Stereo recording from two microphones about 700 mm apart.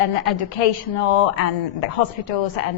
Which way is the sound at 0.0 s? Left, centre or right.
Left.